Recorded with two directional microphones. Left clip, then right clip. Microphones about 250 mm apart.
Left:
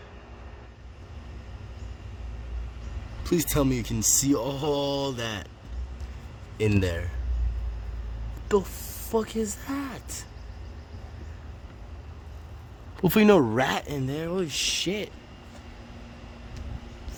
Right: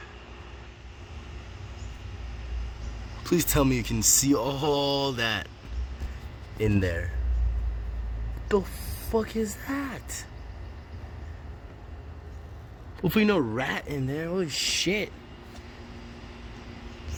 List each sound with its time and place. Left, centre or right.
3.2 s speech: centre
6.6 s speech: centre
9.1 s speech: centre
13.0 s speech: left
13.8 s speech: centre